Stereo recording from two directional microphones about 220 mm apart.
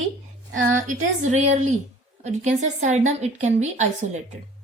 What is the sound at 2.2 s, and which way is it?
A woman's voice, 30° right (ahead or behind).